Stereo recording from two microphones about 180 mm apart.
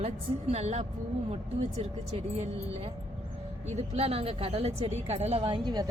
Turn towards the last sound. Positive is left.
turn(degrees=-25)  # may be behind; listen again after turning